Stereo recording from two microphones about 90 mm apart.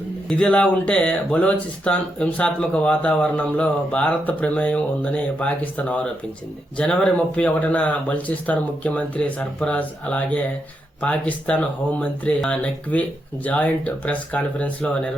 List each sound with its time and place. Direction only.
0.3 s speech: 10° left (ahead or behind)